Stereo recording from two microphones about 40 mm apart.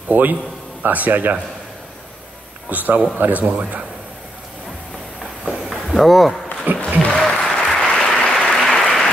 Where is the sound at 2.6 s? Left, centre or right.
Right.